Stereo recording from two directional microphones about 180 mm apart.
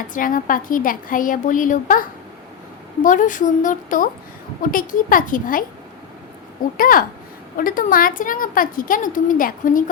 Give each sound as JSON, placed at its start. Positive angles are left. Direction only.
{"t": 0.1, "sound": "a woman's voice", "side_deg": 50}
{"t": 6.7, "sound": "a woman's voice", "side_deg": 50}